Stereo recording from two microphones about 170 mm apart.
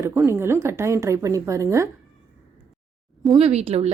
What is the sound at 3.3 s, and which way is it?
Speech, 40° right (ahead or behind).